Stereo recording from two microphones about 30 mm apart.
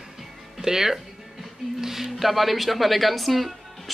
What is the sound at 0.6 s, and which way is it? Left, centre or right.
Speech, centre.